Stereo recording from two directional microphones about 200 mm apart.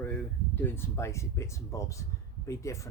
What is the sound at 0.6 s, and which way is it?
Speech, 10° left (ahead or behind).